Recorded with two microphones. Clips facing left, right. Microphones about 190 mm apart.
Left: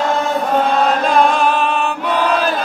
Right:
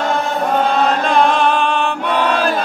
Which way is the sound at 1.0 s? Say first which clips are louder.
Even; centre (ahead or behind).